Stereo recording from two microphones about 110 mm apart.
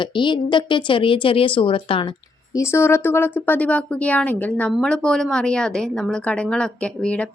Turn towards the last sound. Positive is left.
turn(degrees=10)  # may be behind; listen again after turning